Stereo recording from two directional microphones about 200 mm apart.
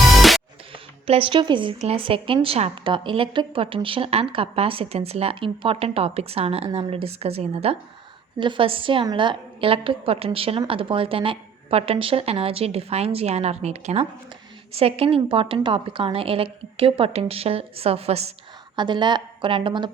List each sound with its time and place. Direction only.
0.1 s music: centre (ahead or behind)
1.0 s speech: 30° right (ahead or behind)